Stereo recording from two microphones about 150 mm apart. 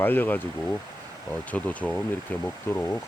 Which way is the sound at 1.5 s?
10° left (ahead or behind).